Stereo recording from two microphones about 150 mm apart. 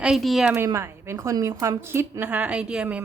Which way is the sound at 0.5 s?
15° right (ahead or behind).